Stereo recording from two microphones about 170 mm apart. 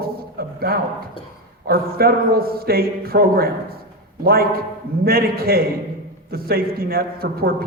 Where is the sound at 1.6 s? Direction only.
65° right (ahead or behind).